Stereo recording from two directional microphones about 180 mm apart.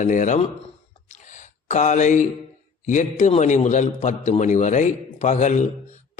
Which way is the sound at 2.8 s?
40° left (ahead or behind).